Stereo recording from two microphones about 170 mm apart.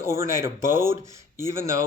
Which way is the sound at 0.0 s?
15° right (ahead or behind).